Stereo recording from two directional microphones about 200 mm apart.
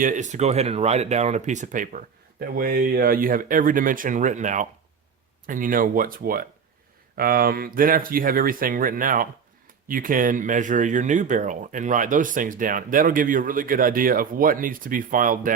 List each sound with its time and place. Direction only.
0.0 s speech: 40° right (ahead or behind)